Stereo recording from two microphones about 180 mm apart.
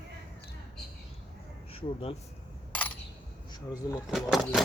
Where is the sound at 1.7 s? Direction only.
30° left (ahead or behind).